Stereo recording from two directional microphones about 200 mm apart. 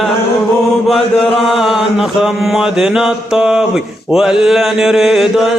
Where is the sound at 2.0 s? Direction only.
Centre (ahead or behind).